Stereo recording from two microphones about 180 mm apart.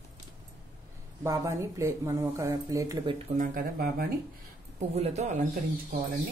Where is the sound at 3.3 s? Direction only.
50° right (ahead or behind).